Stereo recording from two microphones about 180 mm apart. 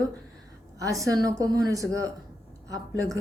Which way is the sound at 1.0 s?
20° right (ahead or behind).